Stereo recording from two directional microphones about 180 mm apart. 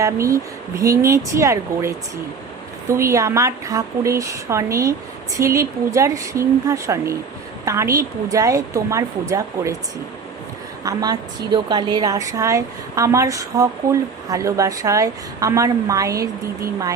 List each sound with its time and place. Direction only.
0.0 s a woman's voice: 15° right (ahead or behind)
2.9 s a woman's voice: 15° right (ahead or behind)
10.8 s a woman's voice: 20° right (ahead or behind)